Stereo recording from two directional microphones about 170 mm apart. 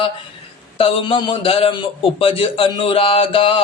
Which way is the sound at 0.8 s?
30° left (ahead or behind).